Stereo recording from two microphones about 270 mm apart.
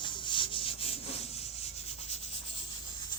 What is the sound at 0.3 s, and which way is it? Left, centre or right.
Rub, centre.